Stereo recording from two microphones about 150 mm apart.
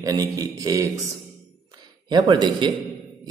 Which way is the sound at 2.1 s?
30° right (ahead or behind).